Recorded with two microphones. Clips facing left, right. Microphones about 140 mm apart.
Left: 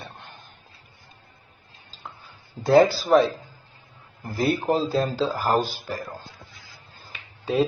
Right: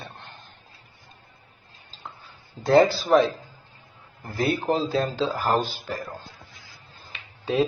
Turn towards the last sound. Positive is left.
turn(degrees=0)  # may be behind; listen again after turning